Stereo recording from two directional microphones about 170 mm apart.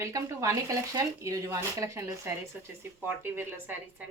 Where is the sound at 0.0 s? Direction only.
20° right (ahead or behind).